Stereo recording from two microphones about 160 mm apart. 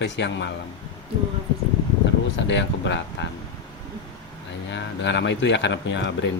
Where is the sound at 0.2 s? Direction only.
90° left.